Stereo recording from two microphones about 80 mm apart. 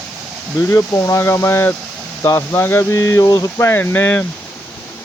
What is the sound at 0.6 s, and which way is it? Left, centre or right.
Speech, left.